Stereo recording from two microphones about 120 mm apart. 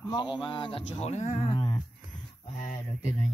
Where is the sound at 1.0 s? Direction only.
70° left (ahead or behind).